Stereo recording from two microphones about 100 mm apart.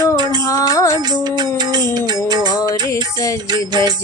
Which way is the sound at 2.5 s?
35° left (ahead or behind).